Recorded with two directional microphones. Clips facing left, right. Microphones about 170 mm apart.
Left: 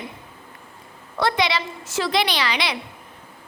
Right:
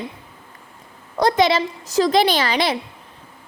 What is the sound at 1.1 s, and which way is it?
A woman's voice, 45° right (ahead or behind).